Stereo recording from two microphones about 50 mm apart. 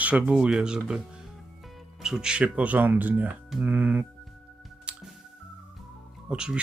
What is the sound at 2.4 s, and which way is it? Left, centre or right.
Speech, right.